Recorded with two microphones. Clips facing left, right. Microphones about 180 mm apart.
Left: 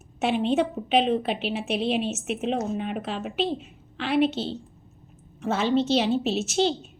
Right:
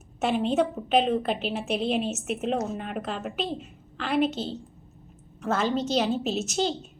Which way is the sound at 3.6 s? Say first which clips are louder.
Left 2 dB; centre (ahead or behind).